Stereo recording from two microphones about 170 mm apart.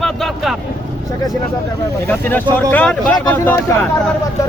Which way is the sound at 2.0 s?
10° left (ahead or behind).